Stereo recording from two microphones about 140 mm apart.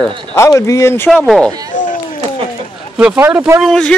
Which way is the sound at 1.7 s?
65° left (ahead or behind).